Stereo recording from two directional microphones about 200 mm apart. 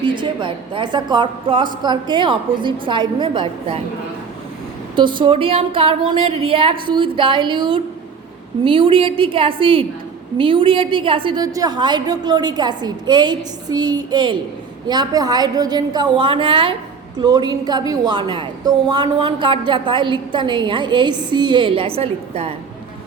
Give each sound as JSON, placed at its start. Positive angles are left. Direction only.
{"t": 0.0, "sound": "a woman's voice", "side_deg": -25}
{"t": 4.9, "sound": "a woman's voice", "side_deg": -25}